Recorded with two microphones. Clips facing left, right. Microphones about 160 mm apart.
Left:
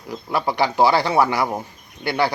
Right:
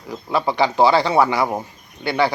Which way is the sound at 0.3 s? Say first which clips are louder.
Right 2 dB; 20° right (ahead or behind).